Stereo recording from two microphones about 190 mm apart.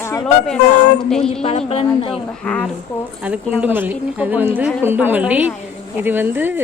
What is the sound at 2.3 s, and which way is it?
Speech, 5° left (ahead or behind).